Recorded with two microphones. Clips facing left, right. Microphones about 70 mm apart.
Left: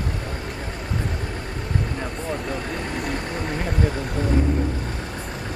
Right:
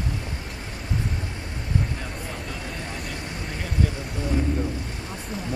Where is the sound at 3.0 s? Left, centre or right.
Left.